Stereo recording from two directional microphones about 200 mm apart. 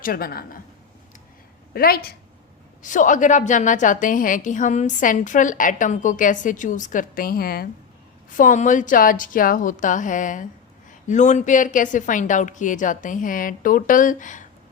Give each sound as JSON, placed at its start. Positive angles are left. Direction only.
{"t": 0.0, "sound": "a woman's voice", "side_deg": 45}
{"t": 1.7, "sound": "a woman's voice", "side_deg": 50}